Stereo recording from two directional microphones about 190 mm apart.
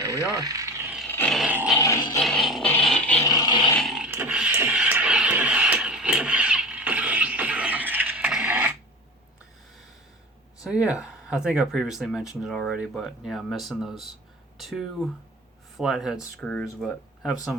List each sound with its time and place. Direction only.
0.0 s a sound: 20° right (ahead or behind)
1.0 s dog: 10° left (ahead or behind)
1.5 s music: 10° right (ahead or behind)
1.7 s music: 15° left (ahead or behind)
2.2 s music: centre (ahead or behind)
3.2 s roar: 20° left (ahead or behind)
3.7 s a sound: centre (ahead or behind)
10.6 s speech: 5° right (ahead or behind)